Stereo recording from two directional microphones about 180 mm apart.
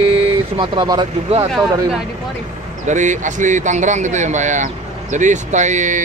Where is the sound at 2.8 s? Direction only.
40° right (ahead or behind).